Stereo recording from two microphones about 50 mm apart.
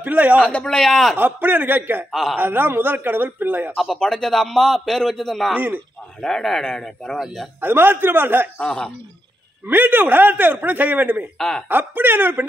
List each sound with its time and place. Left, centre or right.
0.0 s a man's voice: right
0.4 s a man's voice: centre
1.1 s a man's voice: right
3.7 s a man's voice: centre
7.6 s a man's voice: right
8.5 s speech: centre
9.7 s a man's voice: right
11.3 s a man's voice: centre
11.7 s a man's voice: right